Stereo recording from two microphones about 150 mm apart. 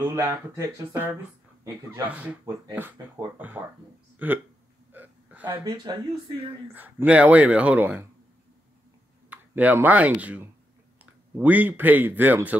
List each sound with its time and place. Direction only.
0.0 s speech: 20° right (ahead or behind)
3.3 s speech: 10° right (ahead or behind)
4.9 s hiccup: 10° right (ahead or behind)
5.6 s speech: 30° right (ahead or behind)
6.7 s speech: 10° right (ahead or behind)
9.3 s speech: 10° right (ahead or behind)